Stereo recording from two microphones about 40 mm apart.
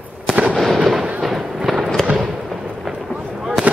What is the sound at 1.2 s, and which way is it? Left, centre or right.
Fireworks, centre.